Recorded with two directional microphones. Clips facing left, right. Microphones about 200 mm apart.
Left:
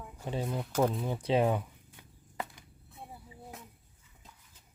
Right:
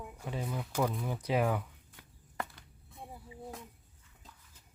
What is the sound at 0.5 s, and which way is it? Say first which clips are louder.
Speech: left 4 dB; 25° left (ahead or behind).